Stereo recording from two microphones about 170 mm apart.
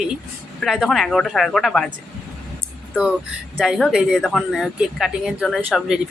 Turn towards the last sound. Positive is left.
turn(degrees=0)  # may be behind; listen again after turning